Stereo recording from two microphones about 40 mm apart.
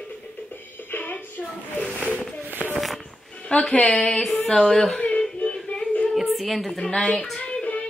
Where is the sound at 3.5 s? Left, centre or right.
Left.